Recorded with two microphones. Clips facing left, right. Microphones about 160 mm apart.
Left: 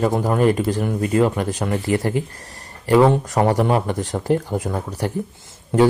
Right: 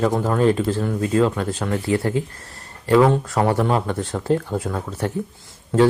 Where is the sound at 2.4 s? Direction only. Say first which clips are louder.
Left 2 dB; 15° left (ahead or behind).